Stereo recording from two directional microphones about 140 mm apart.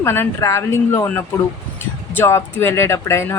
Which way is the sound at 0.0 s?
20° left (ahead or behind).